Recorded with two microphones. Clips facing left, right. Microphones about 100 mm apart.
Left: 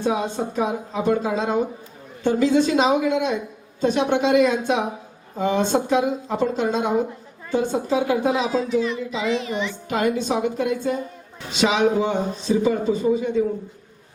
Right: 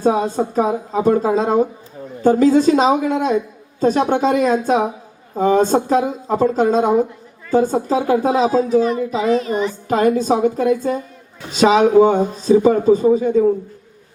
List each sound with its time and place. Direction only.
0.0 s a child's voice: 40° right (ahead or behind)